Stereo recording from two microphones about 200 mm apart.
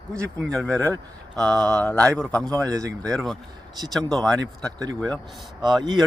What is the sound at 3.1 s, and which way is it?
A man's voice, centre (ahead or behind).